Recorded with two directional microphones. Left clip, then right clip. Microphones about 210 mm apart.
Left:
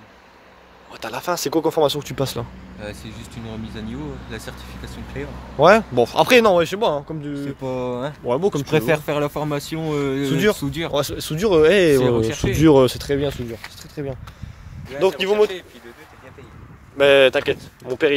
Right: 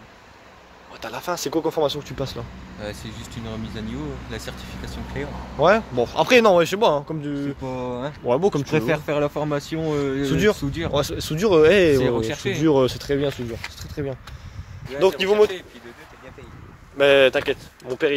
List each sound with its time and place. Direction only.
0.9 s speech: 30° left (ahead or behind)
2.8 s speech: centre (ahead or behind)
5.6 s speech: 30° left (ahead or behind)
6.4 s speech: centre (ahead or behind)
7.6 s speech: 45° left (ahead or behind)
8.3 s speech: centre (ahead or behind)
8.7 s speech: 45° left (ahead or behind)
10.2 s speech: 10° left (ahead or behind)
10.6 s speech: 50° left (ahead or behind)
10.9 s speech: 10° left (ahead or behind)
11.9 s speech: 20° left (ahead or behind)
12.5 s speech: 35° left (ahead or behind)
12.8 s speech: 20° left (ahead or behind); by 15.5 s 5° left (ahead or behind)
16.9 s speech: 20° left (ahead or behind)